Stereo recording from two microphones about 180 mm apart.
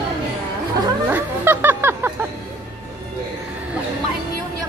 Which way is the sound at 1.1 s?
10° right (ahead or behind).